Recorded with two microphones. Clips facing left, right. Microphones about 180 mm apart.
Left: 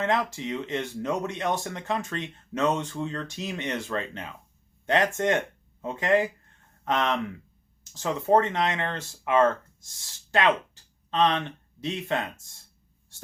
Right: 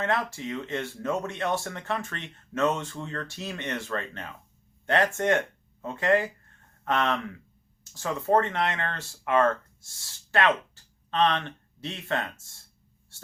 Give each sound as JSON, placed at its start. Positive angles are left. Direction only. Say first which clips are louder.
{"t": 0.0, "sound": "speech", "louder": "left 2 dB", "side_deg": 20}